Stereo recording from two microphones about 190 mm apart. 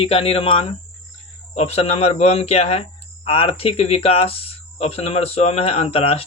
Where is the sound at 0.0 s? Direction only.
30° left (ahead or behind).